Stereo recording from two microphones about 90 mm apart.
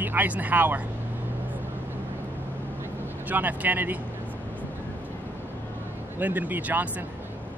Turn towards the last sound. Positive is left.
turn(degrees=-20)  # may be behind; listen again after turning